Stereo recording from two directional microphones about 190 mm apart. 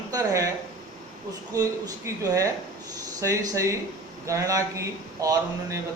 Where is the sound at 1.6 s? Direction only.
15° right (ahead or behind).